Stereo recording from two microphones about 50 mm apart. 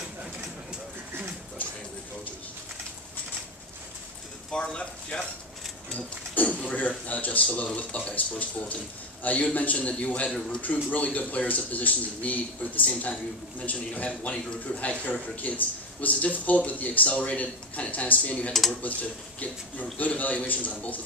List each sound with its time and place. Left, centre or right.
0.2 s a sound: right
4.5 s speech: centre
6.6 s speech: left
18.5 s speech: centre
18.8 s speech: left